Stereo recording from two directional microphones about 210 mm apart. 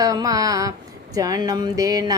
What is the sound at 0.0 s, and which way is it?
Mantra, 15° right (ahead or behind).